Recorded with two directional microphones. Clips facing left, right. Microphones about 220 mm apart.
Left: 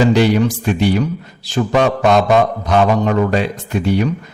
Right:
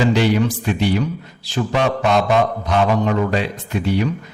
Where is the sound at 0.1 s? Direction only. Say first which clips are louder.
Left 3 dB; 45° left (ahead or behind).